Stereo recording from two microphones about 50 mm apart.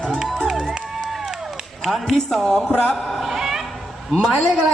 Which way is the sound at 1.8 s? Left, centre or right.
Centre.